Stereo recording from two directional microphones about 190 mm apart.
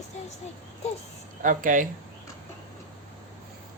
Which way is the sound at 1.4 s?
45° right (ahead or behind).